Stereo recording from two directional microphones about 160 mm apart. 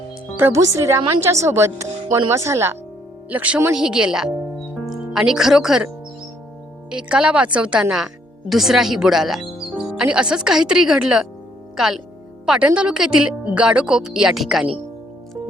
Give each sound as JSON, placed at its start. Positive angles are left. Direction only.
{"t": 0.3, "sound": "speech", "side_deg": -15}
{"t": 6.9, "sound": "speech", "side_deg": -5}